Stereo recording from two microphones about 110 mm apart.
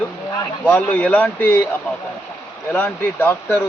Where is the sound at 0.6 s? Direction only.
15° left (ahead or behind).